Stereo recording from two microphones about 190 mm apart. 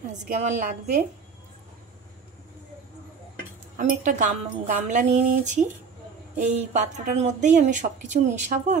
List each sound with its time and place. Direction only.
0.4 s speech: 40° right (ahead or behind)
3.7 s speech: 40° right (ahead or behind)